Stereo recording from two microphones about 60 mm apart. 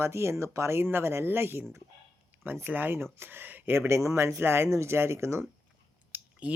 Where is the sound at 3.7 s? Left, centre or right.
Right.